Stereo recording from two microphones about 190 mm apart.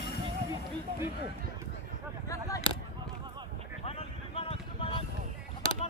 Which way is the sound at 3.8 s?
30° left (ahead or behind).